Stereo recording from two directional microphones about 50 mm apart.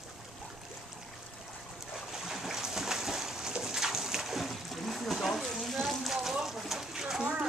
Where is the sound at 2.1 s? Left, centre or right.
Centre.